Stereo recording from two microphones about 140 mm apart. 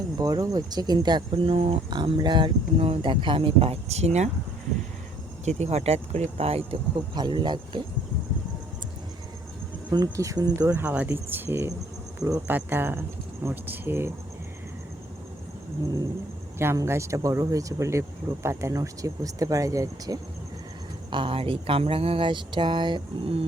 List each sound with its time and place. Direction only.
0.2 s speech: 25° right (ahead or behind); by 1.8 s 45° right (ahead or behind)
1.9 s speech: 30° right (ahead or behind); by 4.3 s 50° right (ahead or behind)
5.5 s speech: 50° right (ahead or behind)
7.2 s speech: 30° right (ahead or behind)
9.9 s speech: 25° right (ahead or behind)
10.8 s speech: 10° right (ahead or behind)
16.6 s speech: 20° right (ahead or behind)
21.1 s speech: 35° right (ahead or behind)